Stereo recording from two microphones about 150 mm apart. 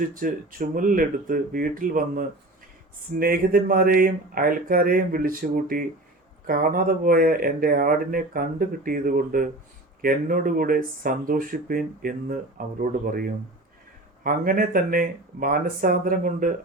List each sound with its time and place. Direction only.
0.1 s speech: 65° right (ahead or behind)